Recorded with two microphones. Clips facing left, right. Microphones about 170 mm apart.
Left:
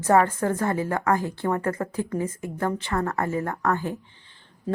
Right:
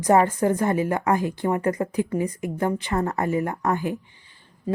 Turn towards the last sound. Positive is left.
turn(degrees=-10)  # may be behind; listen again after turning